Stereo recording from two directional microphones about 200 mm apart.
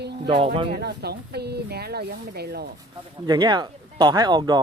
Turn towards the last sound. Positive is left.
turn(degrees=-20)  # may be behind; listen again after turning